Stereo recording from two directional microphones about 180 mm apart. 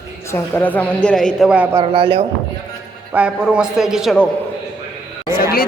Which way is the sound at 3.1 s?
5° right (ahead or behind).